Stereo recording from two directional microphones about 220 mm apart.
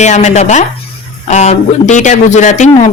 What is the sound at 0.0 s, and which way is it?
Speech, 30° left (ahead or behind).